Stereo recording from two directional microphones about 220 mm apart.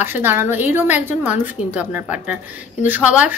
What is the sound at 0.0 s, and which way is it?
A woman's voice, 10° right (ahead or behind).